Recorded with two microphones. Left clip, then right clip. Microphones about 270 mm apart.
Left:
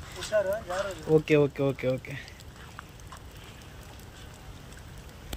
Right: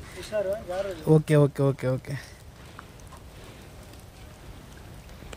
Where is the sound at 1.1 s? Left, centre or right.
Right.